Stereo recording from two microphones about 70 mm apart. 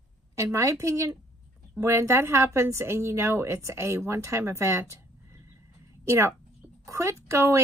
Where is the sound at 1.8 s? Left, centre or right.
Right.